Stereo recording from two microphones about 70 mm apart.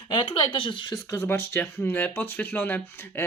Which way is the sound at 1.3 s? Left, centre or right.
Left.